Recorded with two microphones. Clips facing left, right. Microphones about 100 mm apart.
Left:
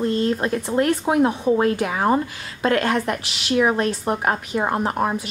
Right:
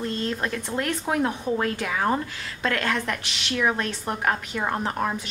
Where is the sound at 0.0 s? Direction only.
25° left (ahead or behind).